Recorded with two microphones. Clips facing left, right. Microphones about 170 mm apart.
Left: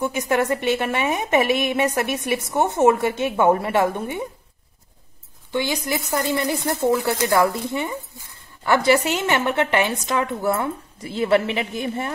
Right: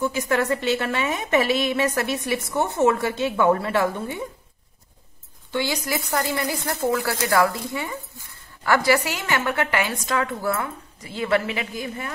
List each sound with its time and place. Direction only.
0.0 s a woman's voice: 20° left (ahead or behind)
5.5 s a woman's voice: 20° left (ahead or behind)